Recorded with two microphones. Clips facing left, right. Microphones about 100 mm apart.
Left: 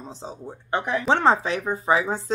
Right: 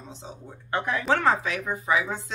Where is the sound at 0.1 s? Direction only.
35° left (ahead or behind).